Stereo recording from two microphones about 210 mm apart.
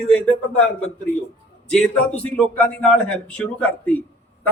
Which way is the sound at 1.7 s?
5° left (ahead or behind).